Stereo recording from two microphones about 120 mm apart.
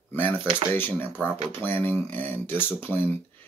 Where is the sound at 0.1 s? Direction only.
15° left (ahead or behind).